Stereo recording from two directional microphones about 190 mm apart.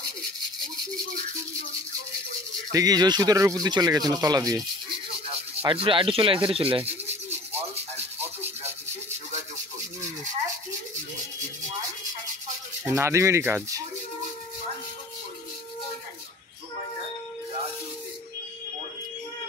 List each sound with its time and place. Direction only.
2.7 s speech: 20° right (ahead or behind)
5.7 s speech: 25° right (ahead or behind)
6.8 s rub: 10° right (ahead or behind)
8.2 s a sound: 10° right (ahead or behind)
12.8 s speech: 15° right (ahead or behind)